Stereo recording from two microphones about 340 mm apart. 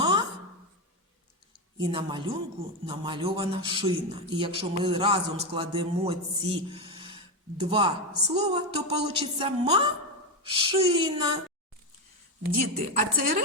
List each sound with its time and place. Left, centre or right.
0.0 s a sound: centre
1.8 s a man's voice: centre
12.7 s a woman's voice: right